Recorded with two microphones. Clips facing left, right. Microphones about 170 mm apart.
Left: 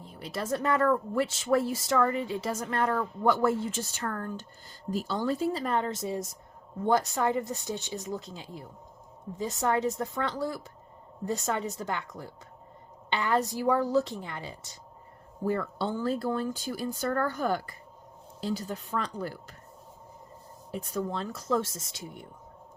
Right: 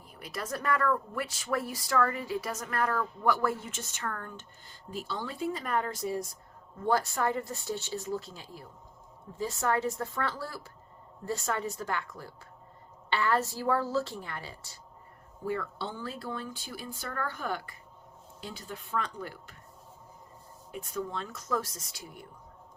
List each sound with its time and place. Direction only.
0.0 s speech: 30° left (ahead or behind)
5.5 s speech: 30° left (ahead or behind)
15.4 s speech: 45° left (ahead or behind)
20.7 s speech: 35° left (ahead or behind)